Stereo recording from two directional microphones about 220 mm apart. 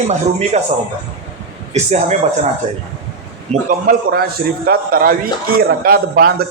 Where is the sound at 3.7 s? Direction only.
40° right (ahead or behind).